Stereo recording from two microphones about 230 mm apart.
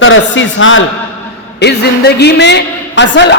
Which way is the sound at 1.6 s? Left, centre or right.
Left.